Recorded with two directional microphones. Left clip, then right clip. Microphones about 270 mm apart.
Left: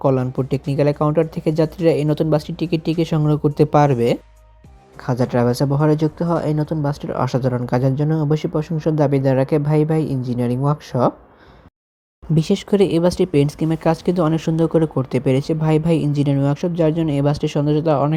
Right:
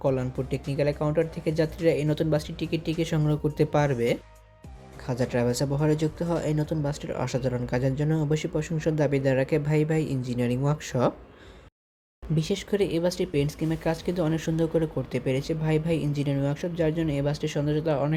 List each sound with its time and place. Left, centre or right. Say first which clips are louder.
0.0 s speech: left 8 dB; centre
12.3 s speech: left 9 dB; left